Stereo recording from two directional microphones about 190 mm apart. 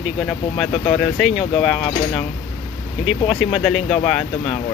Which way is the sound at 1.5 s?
30° left (ahead or behind).